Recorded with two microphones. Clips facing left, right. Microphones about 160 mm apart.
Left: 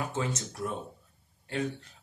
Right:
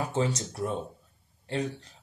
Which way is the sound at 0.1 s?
35° right (ahead or behind).